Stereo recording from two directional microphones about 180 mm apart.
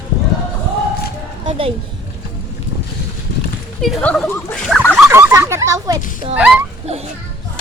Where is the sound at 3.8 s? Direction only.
5° left (ahead or behind).